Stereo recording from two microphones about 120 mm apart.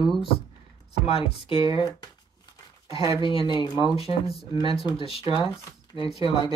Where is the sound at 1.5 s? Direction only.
30° right (ahead or behind).